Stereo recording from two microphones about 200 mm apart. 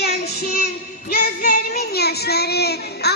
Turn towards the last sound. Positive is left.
turn(degrees=55)  # may be behind; listen again after turning